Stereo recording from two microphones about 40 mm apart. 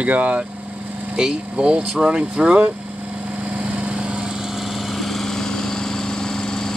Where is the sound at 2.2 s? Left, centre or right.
Right.